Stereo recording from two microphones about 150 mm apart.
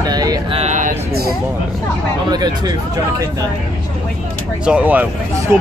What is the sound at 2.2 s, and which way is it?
Speech, 25° right (ahead or behind).